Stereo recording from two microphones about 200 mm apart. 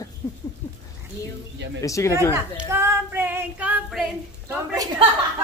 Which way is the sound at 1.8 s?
15° left (ahead or behind).